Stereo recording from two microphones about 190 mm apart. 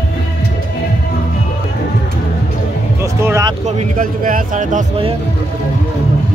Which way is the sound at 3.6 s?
40° right (ahead or behind).